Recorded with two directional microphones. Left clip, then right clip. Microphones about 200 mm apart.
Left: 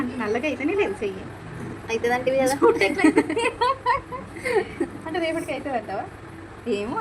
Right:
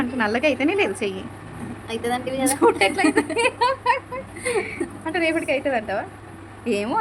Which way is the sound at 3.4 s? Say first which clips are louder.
Right 2 dB; 40° right (ahead or behind).